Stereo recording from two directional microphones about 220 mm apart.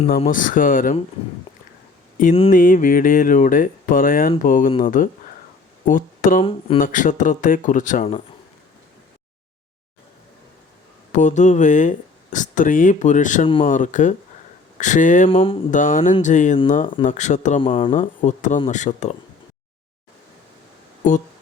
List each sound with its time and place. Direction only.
0.2 s speech: 40° left (ahead or behind)
2.5 s speech: 40° left (ahead or behind)
11.1 s speech: 35° left (ahead or behind)
15.3 s speech: 25° left (ahead or behind)